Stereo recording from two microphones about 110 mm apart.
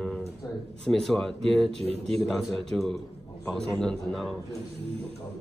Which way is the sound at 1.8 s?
65° right (ahead or behind).